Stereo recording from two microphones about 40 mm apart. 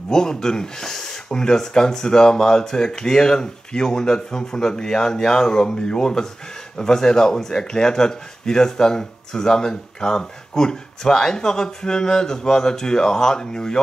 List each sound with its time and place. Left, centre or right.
0.1 s speech: centre